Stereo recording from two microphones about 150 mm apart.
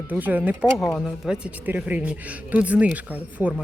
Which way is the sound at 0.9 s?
5° left (ahead or behind).